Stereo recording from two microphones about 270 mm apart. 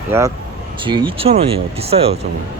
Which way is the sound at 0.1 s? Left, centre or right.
Centre.